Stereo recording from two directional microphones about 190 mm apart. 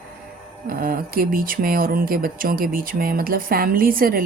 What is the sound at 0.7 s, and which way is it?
Speech, 50° right (ahead or behind).